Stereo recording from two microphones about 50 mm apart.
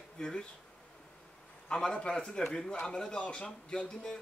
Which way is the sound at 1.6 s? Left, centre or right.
Centre.